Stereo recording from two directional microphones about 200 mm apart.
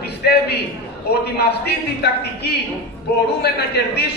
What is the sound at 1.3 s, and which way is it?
A man's voice, 55° left (ahead or behind).